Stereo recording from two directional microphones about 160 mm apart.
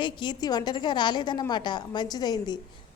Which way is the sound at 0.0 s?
30° left (ahead or behind).